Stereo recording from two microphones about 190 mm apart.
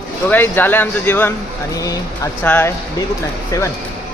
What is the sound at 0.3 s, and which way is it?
Speech, 10° left (ahead or behind).